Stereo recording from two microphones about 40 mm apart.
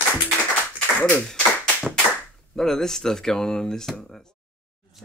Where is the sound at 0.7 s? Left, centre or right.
Left.